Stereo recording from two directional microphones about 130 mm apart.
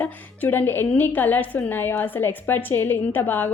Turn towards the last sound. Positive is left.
turn(degrees=15)  # may be behind; listen again after turning